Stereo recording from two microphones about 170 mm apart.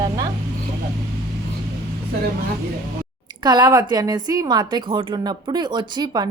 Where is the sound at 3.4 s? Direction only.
25° right (ahead or behind).